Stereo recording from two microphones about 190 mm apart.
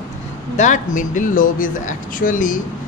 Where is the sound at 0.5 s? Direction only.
40° left (ahead or behind).